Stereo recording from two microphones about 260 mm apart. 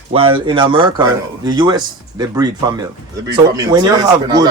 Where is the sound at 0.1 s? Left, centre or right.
Right.